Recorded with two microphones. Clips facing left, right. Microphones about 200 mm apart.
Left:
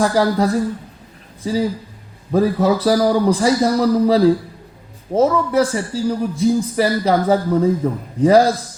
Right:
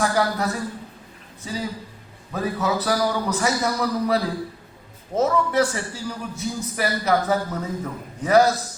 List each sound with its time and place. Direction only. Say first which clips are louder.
0.0 s a man's voice: left 6 dB; 30° left (ahead or behind)
2.3 s a man's voice: left 9 dB; 30° left (ahead or behind)